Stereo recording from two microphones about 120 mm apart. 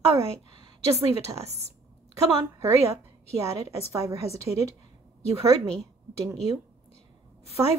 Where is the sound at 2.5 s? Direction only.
25° right (ahead or behind).